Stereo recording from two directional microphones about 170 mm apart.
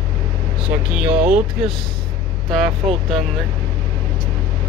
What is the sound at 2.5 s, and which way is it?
Speech, centre (ahead or behind).